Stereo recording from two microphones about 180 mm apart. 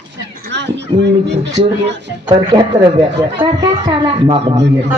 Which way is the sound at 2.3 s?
25° right (ahead or behind).